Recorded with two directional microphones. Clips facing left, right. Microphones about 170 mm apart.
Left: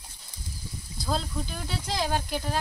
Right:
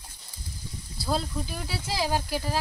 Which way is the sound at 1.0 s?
5° right (ahead or behind).